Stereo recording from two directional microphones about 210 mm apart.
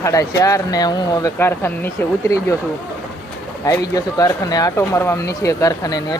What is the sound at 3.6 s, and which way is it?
Speech, 15° left (ahead or behind).